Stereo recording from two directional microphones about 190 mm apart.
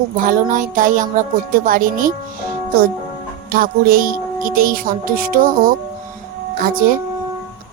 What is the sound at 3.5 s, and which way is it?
Speech, 50° right (ahead or behind).